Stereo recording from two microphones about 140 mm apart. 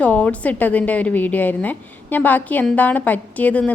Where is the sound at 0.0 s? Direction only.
10° left (ahead or behind).